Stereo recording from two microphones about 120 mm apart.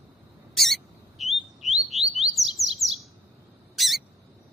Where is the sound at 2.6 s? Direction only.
Centre (ahead or behind).